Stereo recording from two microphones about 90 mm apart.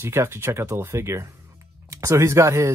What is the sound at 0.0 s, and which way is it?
Speech, 30° right (ahead or behind).